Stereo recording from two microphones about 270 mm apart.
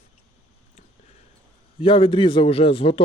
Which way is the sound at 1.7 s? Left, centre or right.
Centre.